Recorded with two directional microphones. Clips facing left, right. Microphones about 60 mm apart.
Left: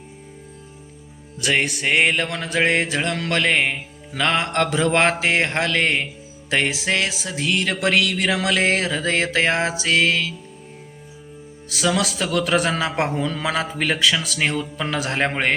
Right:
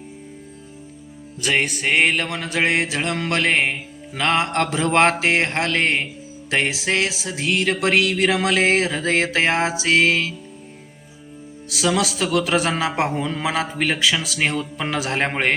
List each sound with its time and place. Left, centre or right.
1.4 s mantra: centre
2.4 s music: centre
4.2 s mantra: centre
6.5 s music: centre
11.7 s mantra: centre
13.2 s a man's voice: centre
13.5 s music: centre